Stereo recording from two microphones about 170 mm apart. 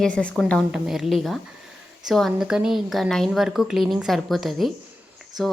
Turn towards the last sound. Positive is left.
turn(degrees=0)  # may be behind; listen again after turning